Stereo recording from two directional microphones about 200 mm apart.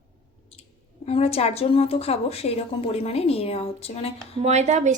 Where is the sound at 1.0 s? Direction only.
30° left (ahead or behind).